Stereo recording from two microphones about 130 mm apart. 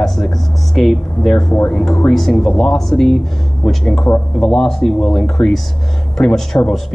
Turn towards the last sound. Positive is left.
turn(degrees=5)  # may be behind; listen again after turning